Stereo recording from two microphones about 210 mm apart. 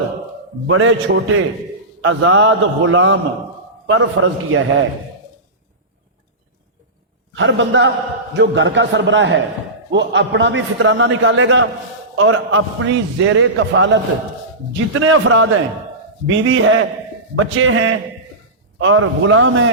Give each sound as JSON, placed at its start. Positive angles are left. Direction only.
{"t": 0.7, "sound": "a man's voice", "side_deg": -70}
{"t": 7.3, "sound": "a man's voice", "side_deg": -60}
{"t": 14.9, "sound": "a man's voice", "side_deg": -70}